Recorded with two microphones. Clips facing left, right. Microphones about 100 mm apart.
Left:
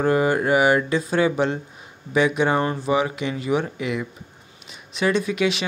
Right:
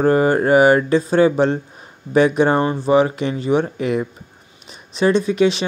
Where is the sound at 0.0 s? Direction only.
40° right (ahead or behind).